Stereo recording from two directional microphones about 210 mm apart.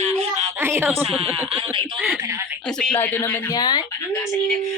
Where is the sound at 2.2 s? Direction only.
10° right (ahead or behind).